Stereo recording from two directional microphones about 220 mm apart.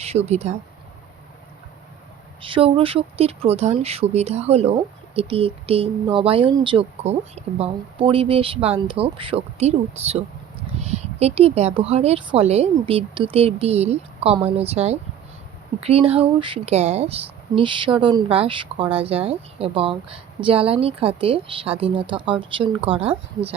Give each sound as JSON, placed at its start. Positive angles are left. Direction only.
{"t": 0.0, "sound": "speech", "side_deg": -30}
{"t": 2.4, "sound": "speech", "side_deg": -25}